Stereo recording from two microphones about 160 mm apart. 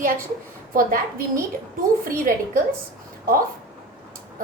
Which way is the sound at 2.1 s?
55° right (ahead or behind).